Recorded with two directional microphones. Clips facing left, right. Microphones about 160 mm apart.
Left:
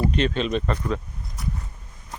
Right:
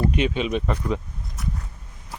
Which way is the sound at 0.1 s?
10° right (ahead or behind).